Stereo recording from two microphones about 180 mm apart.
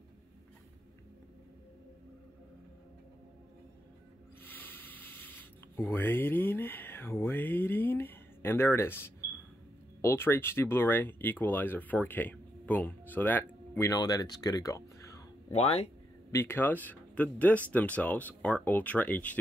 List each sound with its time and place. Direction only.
4.4 s snake: 10° left (ahead or behind)
10.0 s speech: 15° left (ahead or behind)
15.5 s speech: 35° left (ahead or behind)
16.3 s speech: 15° left (ahead or behind)